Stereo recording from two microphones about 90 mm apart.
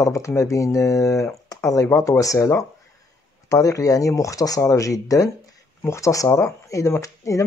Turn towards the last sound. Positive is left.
turn(degrees=35)  # may be behind; listen again after turning